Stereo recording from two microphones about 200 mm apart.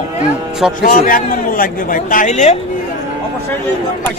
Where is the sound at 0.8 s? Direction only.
45° left (ahead or behind).